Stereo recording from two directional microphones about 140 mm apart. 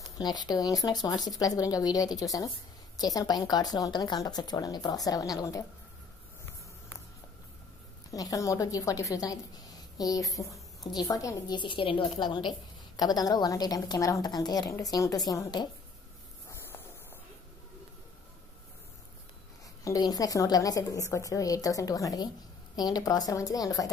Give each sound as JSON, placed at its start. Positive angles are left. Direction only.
{"t": 0.2, "sound": "a woman's voice", "side_deg": 30}
{"t": 8.1, "sound": "a woman's voice", "side_deg": 25}
{"t": 16.4, "sound": "a sound", "side_deg": 15}
{"t": 19.8, "sound": "a woman's voice", "side_deg": 25}